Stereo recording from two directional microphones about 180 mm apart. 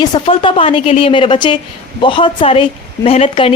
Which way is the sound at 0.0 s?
25° left (ahead or behind).